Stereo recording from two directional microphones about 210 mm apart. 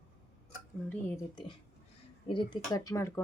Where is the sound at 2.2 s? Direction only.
25° left (ahead or behind).